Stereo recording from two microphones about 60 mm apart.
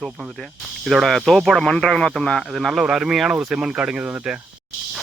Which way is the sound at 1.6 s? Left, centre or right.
Centre.